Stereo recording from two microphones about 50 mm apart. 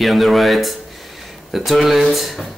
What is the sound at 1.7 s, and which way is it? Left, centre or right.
Speech, centre.